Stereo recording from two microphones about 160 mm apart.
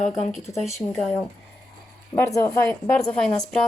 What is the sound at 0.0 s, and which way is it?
Speech, 45° left (ahead or behind).